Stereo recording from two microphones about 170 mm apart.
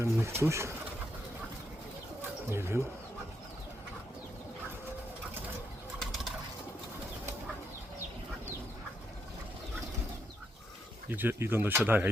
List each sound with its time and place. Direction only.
0.0 s speech: 15° right (ahead or behind)
2.5 s speech: 15° right (ahead or behind)
11.1 s speech: 10° right (ahead or behind)